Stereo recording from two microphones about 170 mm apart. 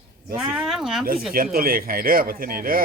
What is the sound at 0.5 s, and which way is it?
Speech, 5° right (ahead or behind).